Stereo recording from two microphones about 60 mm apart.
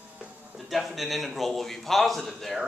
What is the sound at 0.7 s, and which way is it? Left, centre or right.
A man's voice, centre.